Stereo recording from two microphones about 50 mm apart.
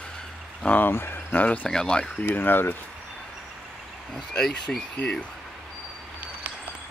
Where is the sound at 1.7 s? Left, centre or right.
Centre.